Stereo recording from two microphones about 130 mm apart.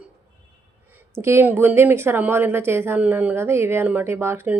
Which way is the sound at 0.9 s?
20° right (ahead or behind).